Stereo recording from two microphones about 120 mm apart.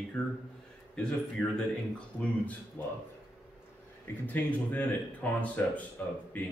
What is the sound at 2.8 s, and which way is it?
Speech, 15° left (ahead or behind).